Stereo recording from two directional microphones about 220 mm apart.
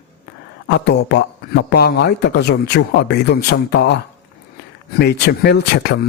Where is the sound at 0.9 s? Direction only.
50° left (ahead or behind).